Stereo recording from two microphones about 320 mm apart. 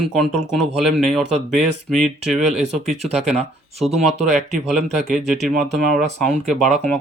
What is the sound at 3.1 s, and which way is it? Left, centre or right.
Speech, centre.